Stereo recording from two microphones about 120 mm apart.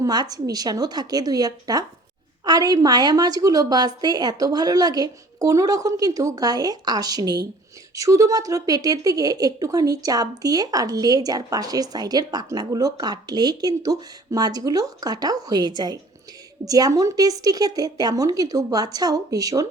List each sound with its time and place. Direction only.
0.0 s a woman's voice: 35° right (ahead or behind)